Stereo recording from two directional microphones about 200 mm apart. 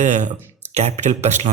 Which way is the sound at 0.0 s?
35° right (ahead or behind).